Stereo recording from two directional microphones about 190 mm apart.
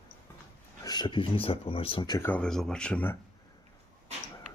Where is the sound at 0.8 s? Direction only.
20° left (ahead or behind).